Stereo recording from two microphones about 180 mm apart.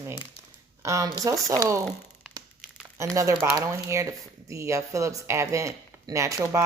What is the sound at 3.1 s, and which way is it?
Speech, 15° right (ahead or behind).